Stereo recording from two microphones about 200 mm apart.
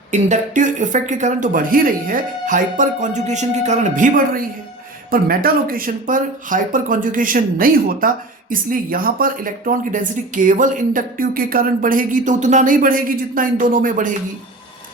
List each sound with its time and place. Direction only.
0.1 s speech: 35° right (ahead or behind)